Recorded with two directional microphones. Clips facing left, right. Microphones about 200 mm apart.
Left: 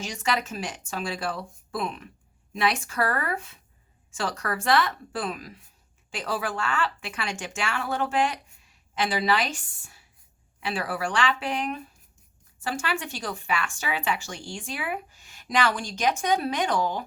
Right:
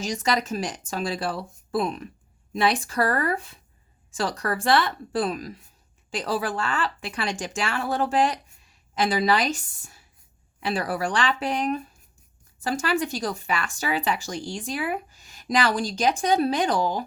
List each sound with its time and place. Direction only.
0.0 s speech: 40° right (ahead or behind)